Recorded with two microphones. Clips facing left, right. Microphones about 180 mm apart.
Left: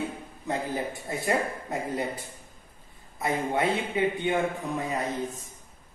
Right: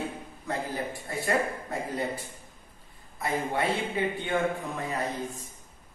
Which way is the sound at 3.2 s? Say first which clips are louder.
Left 2 dB; 20° left (ahead or behind).